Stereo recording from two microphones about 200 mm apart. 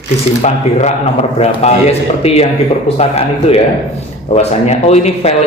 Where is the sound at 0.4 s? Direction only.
35° left (ahead or behind).